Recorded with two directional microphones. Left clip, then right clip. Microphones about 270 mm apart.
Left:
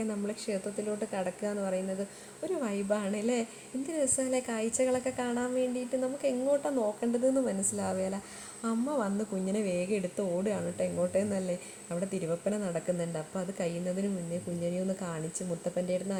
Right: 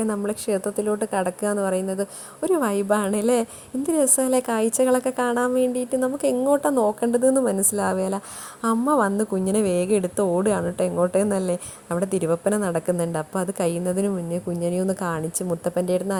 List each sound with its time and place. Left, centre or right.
0.0 s a woman's voice: right